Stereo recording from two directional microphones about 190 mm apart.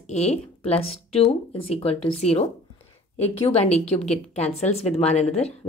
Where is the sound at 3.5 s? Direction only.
35° left (ahead or behind).